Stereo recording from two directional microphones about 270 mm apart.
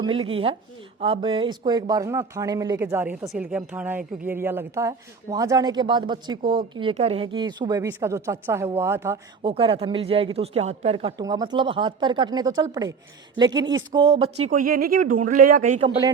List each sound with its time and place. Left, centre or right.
0.0 s a woman's voice: centre